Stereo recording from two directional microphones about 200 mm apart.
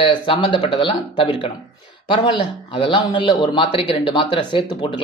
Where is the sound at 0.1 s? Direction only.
25° left (ahead or behind).